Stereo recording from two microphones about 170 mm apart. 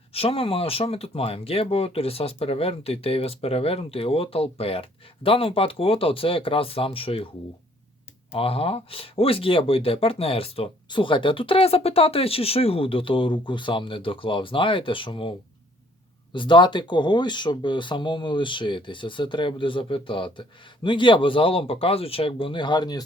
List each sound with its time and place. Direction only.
0.1 s speech: 35° left (ahead or behind)
8.3 s speech: 35° left (ahead or behind)
16.3 s speech: 30° left (ahead or behind)